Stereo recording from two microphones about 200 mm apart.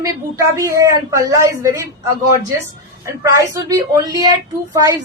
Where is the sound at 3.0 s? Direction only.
15° right (ahead or behind).